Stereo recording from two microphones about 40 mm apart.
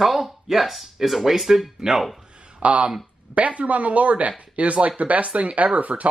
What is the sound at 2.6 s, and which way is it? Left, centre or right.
Speech, right.